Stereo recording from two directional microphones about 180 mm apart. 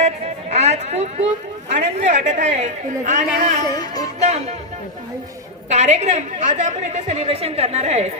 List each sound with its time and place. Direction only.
0.5 s a sound: 35° right (ahead or behind)
1.7 s a woman's voice: 35° right (ahead or behind)
5.6 s a woman's voice: 40° right (ahead or behind)